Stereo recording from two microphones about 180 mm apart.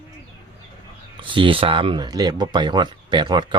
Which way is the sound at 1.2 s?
30° right (ahead or behind).